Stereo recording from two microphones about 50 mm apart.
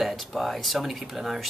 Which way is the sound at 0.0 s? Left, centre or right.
Centre.